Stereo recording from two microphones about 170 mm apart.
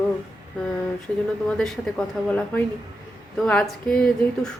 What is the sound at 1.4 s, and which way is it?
Speech, 5° left (ahead or behind).